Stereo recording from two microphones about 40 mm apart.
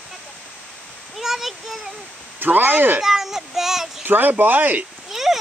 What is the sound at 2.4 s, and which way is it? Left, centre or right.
Speech, right.